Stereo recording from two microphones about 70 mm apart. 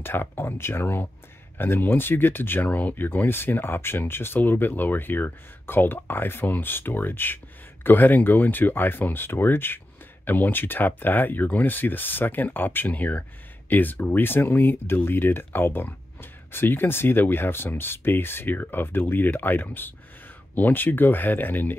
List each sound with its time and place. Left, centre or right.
0.0 s speech: left